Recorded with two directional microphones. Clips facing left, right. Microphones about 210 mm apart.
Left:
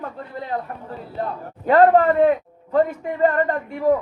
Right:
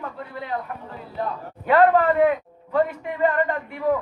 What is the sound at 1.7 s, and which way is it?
A man's voice, 40° left (ahead or behind).